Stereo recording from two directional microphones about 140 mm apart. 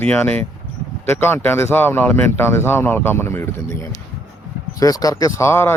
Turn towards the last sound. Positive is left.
turn(degrees=20)  # may be behind; listen again after turning